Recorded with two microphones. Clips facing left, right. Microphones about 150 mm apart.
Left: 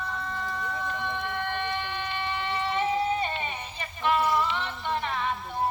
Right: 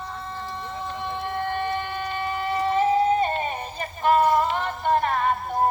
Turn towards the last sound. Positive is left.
turn(degrees=-45)  # may be behind; listen again after turning